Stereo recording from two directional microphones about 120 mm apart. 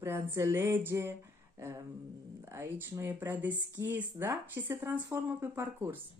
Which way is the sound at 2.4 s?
20° right (ahead or behind).